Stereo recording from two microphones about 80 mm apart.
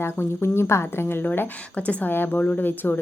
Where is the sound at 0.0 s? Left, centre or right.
Left.